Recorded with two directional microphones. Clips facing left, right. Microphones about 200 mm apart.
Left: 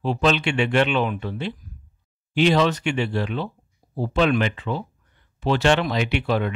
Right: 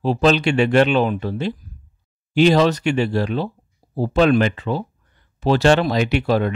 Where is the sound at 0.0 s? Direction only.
40° right (ahead or behind).